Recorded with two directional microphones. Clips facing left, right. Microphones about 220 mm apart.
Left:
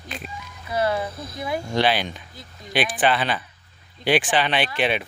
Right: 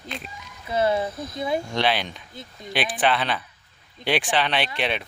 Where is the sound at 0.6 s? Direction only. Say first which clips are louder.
Right 1 dB; 25° right (ahead or behind).